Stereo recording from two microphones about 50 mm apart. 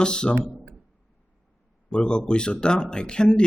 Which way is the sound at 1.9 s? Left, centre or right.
Centre.